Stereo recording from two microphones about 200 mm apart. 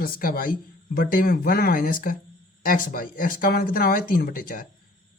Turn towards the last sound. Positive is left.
turn(degrees=45)  # may be behind; listen again after turning